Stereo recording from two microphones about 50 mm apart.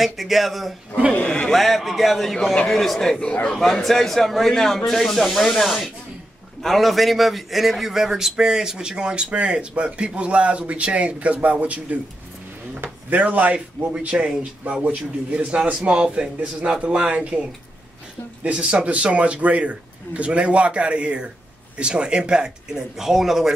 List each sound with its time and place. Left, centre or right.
0.0 s a man's voice: centre
1.1 s a man's voice: centre
1.5 s a man's voice: centre; by 13.6 s right
13.9 s a man's voice: centre
14.6 s a man's voice: right; by 23.5 s centre